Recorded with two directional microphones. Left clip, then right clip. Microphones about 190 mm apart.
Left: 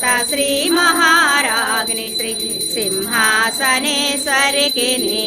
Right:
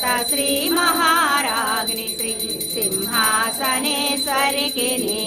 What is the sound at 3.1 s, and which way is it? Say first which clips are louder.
Music: left 5 dB; 5° left (ahead or behind).